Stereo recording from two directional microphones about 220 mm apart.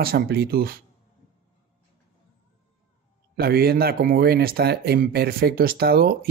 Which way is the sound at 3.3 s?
45° right (ahead or behind).